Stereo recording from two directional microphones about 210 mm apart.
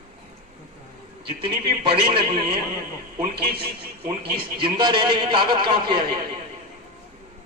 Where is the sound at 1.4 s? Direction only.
25° right (ahead or behind).